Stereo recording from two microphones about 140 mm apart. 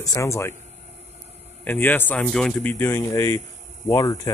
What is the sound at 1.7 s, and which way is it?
Speech, 15° left (ahead or behind).